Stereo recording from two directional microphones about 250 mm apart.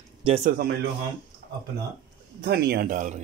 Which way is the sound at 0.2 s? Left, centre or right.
Right.